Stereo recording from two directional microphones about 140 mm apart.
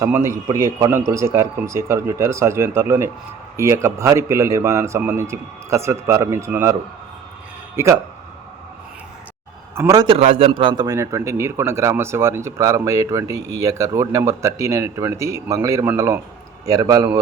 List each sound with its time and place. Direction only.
0.0 s a man's voice: 20° right (ahead or behind)
7.8 s speech: 20° right (ahead or behind)
9.7 s a man's voice: 20° right (ahead or behind)
10.1 s a man's voice: 45° right (ahead or behind); by 17.2 s 25° right (ahead or behind)